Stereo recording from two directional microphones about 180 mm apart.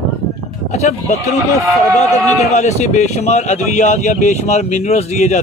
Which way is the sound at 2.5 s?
40° left (ahead or behind).